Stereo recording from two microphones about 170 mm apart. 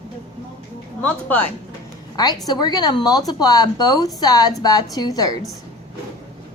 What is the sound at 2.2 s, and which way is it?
Speech, 25° left (ahead or behind).